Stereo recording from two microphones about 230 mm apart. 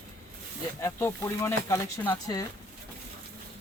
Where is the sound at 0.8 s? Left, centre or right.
Centre.